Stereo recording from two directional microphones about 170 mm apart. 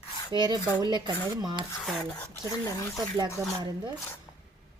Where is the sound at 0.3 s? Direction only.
25° right (ahead or behind).